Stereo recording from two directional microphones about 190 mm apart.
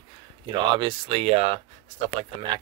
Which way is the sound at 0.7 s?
25° right (ahead or behind).